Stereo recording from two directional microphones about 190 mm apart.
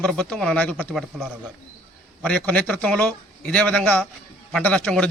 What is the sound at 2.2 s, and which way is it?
A man's voice, 10° left (ahead or behind).